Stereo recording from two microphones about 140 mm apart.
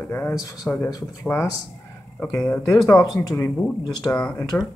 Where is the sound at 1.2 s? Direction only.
15° left (ahead or behind).